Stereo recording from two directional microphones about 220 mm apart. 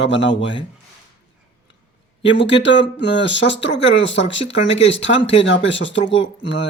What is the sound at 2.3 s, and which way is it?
Speech, 55° left (ahead or behind).